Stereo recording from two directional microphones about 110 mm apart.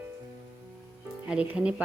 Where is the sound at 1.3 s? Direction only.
10° right (ahead or behind).